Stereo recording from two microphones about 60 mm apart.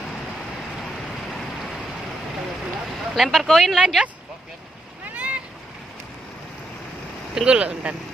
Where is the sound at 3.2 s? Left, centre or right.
Centre.